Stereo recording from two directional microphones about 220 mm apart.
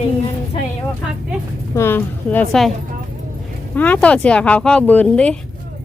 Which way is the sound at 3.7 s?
5° left (ahead or behind).